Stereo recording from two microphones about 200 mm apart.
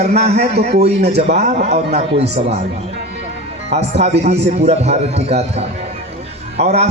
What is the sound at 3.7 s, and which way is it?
A man's voice, 30° right (ahead or behind).